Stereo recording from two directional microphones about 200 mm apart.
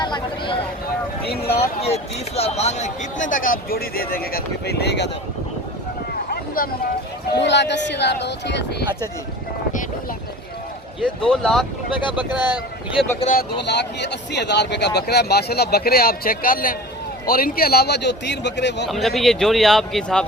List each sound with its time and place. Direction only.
0.0 s speech: 25° left (ahead or behind); by 5.1 s 60° left (ahead or behind)
6.3 s a sound: 50° left (ahead or behind)
7.3 s a man's voice: 60° left (ahead or behind)
11.3 s a man's voice: centre (ahead or behind)
11.9 s speech: 25° left (ahead or behind)
13.1 s speech: 35° left (ahead or behind)
13.6 s a man's voice: 60° left (ahead or behind)
18.9 s a man's voice: centre (ahead or behind)